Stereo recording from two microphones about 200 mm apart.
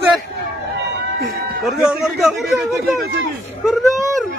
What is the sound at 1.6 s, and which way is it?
A man's voice, 5° right (ahead or behind).